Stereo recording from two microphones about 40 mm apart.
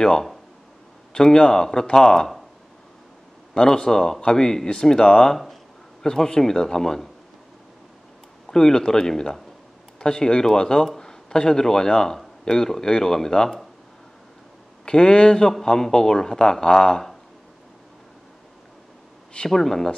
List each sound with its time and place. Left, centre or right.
1.1 s a man's voice: centre
3.5 s a man's voice: centre
8.5 s a man's voice: centre
14.9 s a man's voice: left
19.3 s a man's voice: centre